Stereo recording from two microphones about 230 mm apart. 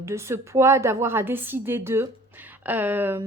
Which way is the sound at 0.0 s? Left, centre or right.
Centre.